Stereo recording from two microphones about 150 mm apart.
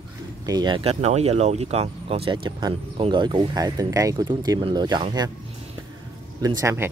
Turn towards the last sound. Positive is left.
turn(degrees=-15)  # may be behind; listen again after turning